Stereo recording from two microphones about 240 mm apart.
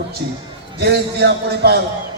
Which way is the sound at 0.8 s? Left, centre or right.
Right.